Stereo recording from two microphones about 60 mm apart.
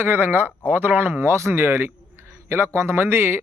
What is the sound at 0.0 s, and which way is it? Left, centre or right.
Speech, right.